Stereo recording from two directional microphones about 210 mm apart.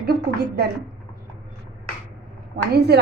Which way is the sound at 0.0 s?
50° right (ahead or behind).